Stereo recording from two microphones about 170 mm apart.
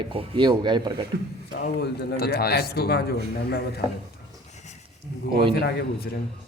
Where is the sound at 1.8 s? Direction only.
65° left (ahead or behind).